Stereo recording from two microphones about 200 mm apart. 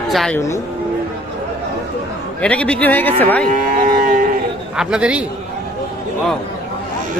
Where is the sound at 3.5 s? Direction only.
40° right (ahead or behind).